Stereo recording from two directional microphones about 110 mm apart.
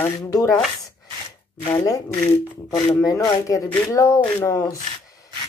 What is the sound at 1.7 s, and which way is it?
Speech, 30° left (ahead or behind).